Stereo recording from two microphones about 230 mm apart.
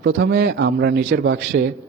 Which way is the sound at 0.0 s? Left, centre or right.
Right.